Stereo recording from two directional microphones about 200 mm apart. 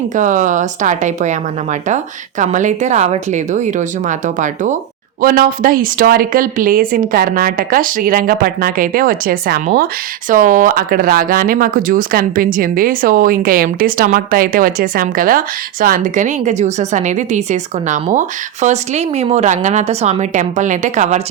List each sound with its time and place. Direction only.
0.1 s a woman's voice: 40° right (ahead or behind)
2.4 s a woman's voice: 40° right (ahead or behind)